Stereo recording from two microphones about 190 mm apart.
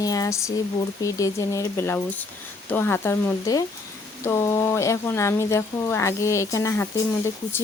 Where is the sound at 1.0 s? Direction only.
15° left (ahead or behind).